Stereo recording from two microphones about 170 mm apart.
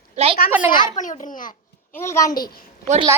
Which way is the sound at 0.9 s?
50° left (ahead or behind).